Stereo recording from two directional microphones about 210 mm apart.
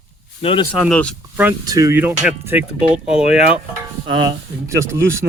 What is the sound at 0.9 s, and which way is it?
Speech, 5° left (ahead or behind).